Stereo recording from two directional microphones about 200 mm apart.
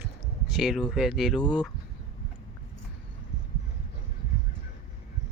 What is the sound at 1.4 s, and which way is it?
Speech, 20° left (ahead or behind).